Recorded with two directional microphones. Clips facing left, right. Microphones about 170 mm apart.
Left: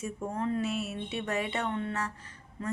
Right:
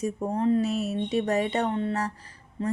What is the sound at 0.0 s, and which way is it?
Speech, 35° right (ahead or behind).